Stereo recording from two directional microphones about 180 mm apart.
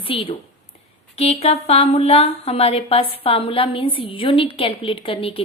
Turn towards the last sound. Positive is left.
turn(degrees=30)  # may be behind; listen again after turning